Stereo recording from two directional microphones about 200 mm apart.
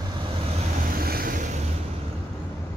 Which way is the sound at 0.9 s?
50° right (ahead or behind).